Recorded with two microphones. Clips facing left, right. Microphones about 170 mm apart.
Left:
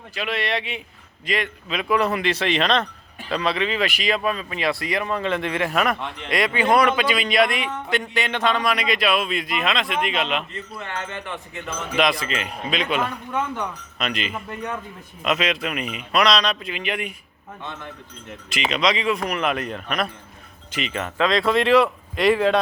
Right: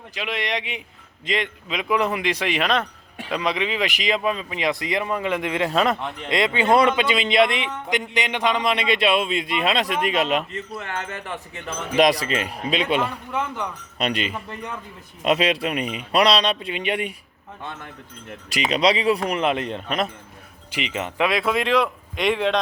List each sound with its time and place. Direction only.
0.1 s a man's voice: 15° right (ahead or behind); by 13.0 s 30° right (ahead or behind)
13.0 s a man's voice: 10° right (ahead or behind)
14.0 s speech: 35° right (ahead or behind)
18.4 s speech: 35° right (ahead or behind)
20.7 s a man's voice: 15° right (ahead or behind)
21.3 s speech: centre (ahead or behind)